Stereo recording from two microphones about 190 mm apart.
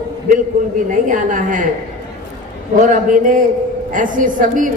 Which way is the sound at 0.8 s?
45° right (ahead or behind).